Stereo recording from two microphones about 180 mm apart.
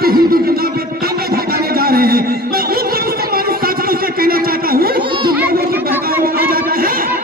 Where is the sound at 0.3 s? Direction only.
55° right (ahead or behind).